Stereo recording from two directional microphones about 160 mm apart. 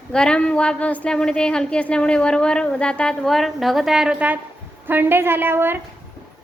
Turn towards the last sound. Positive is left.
turn(degrees=-15)  # may be behind; listen again after turning